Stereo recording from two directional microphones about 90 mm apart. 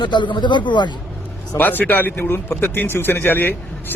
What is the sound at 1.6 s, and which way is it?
Speech, 20° left (ahead or behind).